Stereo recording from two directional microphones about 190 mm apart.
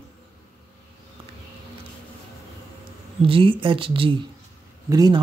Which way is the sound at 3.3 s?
30° right (ahead or behind).